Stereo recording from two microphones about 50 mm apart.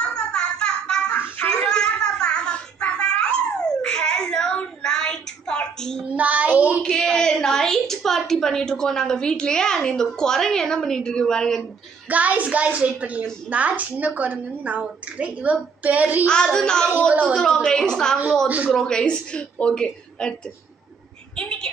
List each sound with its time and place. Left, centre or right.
0.0 s a sound: centre
4.8 s child singing: centre
6.1 s child singing: right
6.8 s a sound: centre
10.1 s a woman's voice: centre
12.1 s a woman's voice: right
16.3 s a woman's voice: centre
21.4 s a woman's voice: centre